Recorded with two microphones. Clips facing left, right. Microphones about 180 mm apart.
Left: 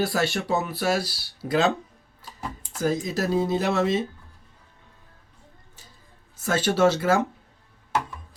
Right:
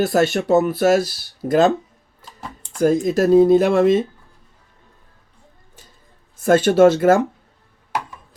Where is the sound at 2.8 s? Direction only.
50° right (ahead or behind).